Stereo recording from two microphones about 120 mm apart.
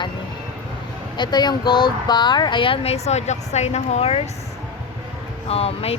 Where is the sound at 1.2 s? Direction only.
35° left (ahead or behind); by 4.2 s 60° left (ahead or behind).